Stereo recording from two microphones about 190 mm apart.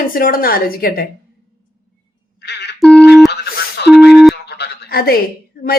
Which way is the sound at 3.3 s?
55° left (ahead or behind).